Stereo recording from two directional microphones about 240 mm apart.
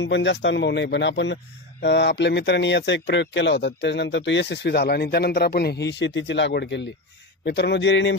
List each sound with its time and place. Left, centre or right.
0.0 s speech: left